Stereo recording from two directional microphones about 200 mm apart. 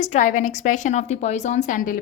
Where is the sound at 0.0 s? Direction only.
40° left (ahead or behind).